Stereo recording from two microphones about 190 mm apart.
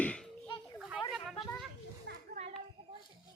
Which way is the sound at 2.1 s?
60° right (ahead or behind).